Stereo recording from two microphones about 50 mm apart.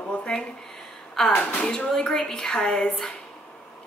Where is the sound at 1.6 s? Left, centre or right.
Centre.